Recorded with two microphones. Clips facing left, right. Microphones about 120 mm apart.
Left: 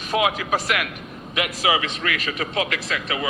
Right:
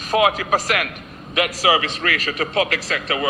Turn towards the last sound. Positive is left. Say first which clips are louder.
# right 3 dB
turn(degrees=-40)  # may be behind; listen again after turning